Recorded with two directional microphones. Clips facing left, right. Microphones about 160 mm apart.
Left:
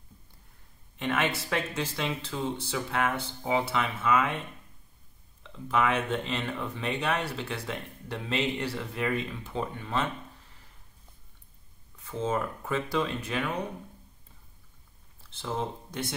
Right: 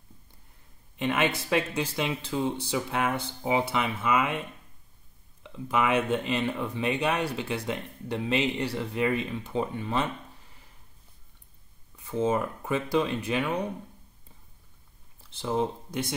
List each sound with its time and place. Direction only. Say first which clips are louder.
0.9 s speech: right 2 dB; 15° right (ahead or behind)
5.4 s speech: even; 15° right (ahead or behind)
12.1 s speech: right 4 dB; 15° right (ahead or behind)
15.4 s speech: right 5 dB; 15° right (ahead or behind)